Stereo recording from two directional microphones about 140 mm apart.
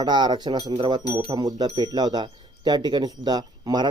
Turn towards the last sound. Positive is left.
turn(degrees=-30)  # may be behind; listen again after turning